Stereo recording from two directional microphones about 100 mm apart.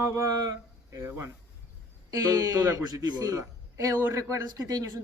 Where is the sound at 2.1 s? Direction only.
35° right (ahead or behind).